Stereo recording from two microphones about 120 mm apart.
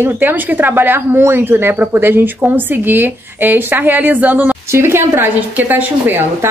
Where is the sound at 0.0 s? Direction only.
15° right (ahead or behind).